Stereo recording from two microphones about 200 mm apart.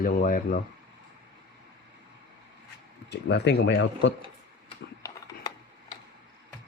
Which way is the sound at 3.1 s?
60° left (ahead or behind).